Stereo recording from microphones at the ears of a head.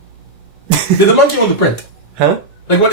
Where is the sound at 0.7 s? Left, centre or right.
Right.